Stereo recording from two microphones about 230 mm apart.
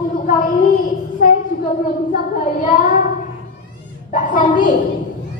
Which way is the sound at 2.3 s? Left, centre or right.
Left.